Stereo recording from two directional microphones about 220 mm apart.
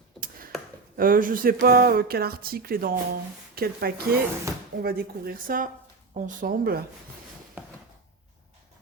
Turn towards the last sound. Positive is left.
turn(degrees=-5)  # may be behind; listen again after turning